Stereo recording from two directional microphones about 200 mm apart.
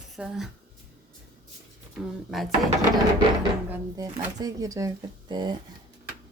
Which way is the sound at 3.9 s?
15° right (ahead or behind).